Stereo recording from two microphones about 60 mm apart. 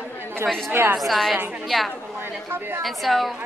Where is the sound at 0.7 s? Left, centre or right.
Right.